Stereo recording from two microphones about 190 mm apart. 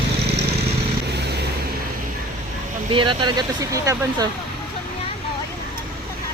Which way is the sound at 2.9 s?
25° right (ahead or behind).